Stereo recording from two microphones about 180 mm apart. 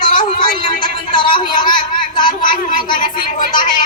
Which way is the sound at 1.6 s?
25° left (ahead or behind).